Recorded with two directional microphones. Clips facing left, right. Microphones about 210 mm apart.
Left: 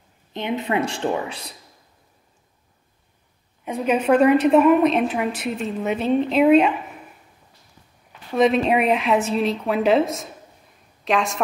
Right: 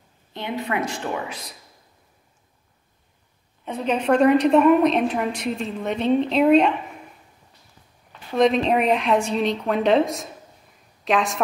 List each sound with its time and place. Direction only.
0.3 s a woman's voice: 20° left (ahead or behind)
3.6 s a woman's voice: 10° left (ahead or behind)
8.4 s a woman's voice: 5° left (ahead or behind)